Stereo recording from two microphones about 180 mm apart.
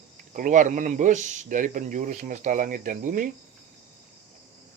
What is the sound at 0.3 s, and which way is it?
Speech, 45° right (ahead or behind).